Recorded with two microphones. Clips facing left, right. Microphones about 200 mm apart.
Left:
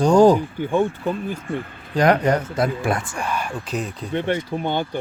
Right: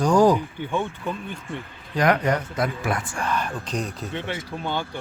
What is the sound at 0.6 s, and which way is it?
Speech, 45° left (ahead or behind).